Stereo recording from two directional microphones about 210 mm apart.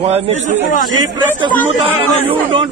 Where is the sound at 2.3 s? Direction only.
25° right (ahead or behind).